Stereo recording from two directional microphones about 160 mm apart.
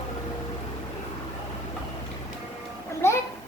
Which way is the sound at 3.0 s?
15° left (ahead or behind).